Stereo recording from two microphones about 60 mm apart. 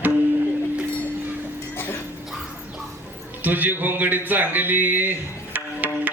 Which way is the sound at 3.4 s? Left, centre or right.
Right.